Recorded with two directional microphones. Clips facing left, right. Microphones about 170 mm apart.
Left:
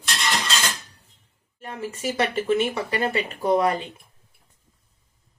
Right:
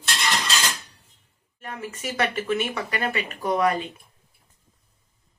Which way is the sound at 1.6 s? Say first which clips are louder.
Left 4 dB; 25° left (ahead or behind).